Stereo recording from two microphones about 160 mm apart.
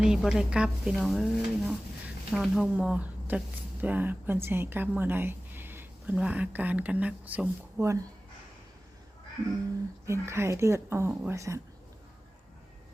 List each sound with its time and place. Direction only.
0.0 s speech: 5° right (ahead or behind)
10.1 s speech: 15° right (ahead or behind)